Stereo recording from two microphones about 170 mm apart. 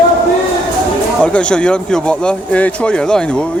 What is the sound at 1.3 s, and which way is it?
Speech, 5° left (ahead or behind).